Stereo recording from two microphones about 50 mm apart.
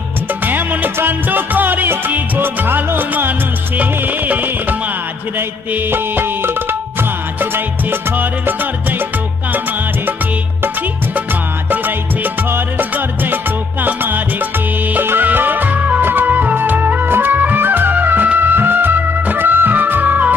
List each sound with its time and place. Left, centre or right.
0.5 s music: right
5.9 s music: right
11.7 s music: right